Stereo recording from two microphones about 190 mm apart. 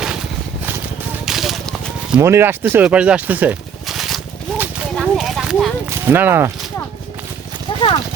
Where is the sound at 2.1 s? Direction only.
15° right (ahead or behind).